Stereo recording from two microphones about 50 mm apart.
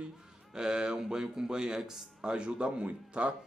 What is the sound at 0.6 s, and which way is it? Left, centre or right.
A man's voice, centre.